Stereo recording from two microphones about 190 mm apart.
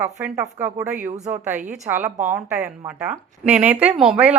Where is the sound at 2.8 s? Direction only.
10° right (ahead or behind).